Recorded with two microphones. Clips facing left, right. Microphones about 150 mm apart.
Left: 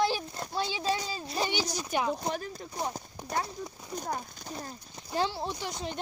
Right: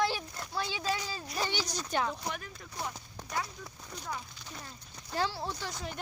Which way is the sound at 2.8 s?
40° left (ahead or behind).